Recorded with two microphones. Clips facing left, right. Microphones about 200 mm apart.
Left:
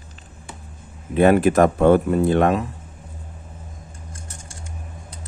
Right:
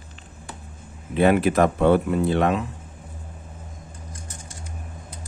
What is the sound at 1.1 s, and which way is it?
Speech, 50° left (ahead or behind).